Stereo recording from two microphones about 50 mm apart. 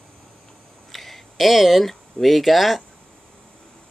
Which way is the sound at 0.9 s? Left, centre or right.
Centre.